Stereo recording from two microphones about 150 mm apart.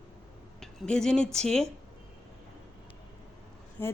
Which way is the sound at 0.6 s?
5° left (ahead or behind).